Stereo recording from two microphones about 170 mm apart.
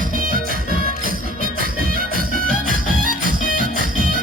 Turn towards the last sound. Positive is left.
turn(degrees=-55)  # may be behind; listen again after turning